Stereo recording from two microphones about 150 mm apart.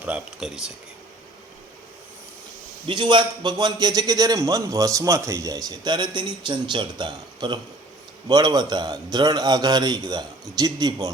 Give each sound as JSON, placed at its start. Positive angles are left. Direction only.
{"t": 0.0, "sound": "speech", "side_deg": -5}
{"t": 2.8, "sound": "a man's voice", "side_deg": -30}